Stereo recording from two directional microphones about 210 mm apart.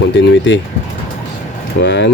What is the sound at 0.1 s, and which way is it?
Speech, 60° left (ahead or behind).